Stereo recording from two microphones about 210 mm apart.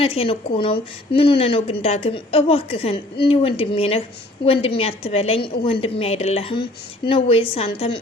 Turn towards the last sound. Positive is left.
turn(degrees=25)  # may be behind; listen again after turning